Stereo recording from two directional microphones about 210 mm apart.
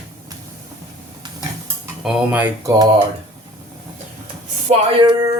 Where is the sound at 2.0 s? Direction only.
5° right (ahead or behind).